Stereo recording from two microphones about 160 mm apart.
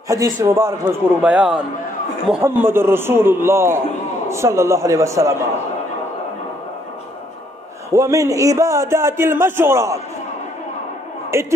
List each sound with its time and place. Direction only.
0.1 s a man's voice: 20° right (ahead or behind)
7.9 s a man's voice: 20° right (ahead or behind)
11.3 s a man's voice: 15° right (ahead or behind)